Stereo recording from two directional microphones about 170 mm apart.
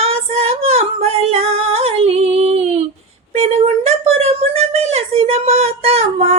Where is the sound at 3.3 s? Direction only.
40° right (ahead or behind).